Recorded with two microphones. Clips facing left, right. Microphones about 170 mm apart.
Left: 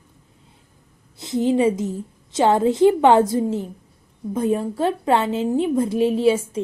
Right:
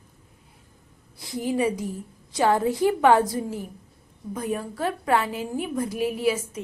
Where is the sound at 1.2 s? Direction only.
25° left (ahead or behind).